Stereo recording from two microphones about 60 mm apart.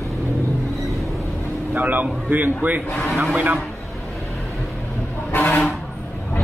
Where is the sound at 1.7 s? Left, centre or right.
Right.